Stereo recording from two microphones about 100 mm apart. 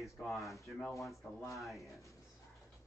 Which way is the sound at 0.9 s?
30° left (ahead or behind).